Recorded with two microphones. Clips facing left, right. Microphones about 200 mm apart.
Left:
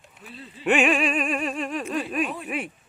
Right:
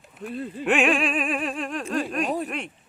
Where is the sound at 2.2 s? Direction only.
40° right (ahead or behind).